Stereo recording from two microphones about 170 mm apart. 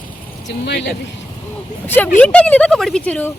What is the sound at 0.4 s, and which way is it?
Speech, 85° left.